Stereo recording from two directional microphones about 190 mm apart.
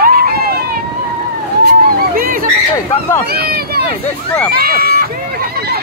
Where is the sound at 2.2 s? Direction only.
45° right (ahead or behind).